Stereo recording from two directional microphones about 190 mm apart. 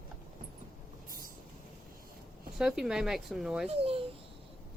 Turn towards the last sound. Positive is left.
turn(degrees=-30)  # may be behind; listen again after turning